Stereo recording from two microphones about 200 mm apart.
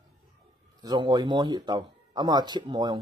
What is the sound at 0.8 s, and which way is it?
Speech, 20° right (ahead or behind).